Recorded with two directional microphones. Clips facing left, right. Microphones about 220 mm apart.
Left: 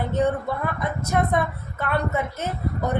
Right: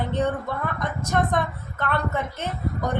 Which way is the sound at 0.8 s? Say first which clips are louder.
Right 1 dB; 10° left (ahead or behind).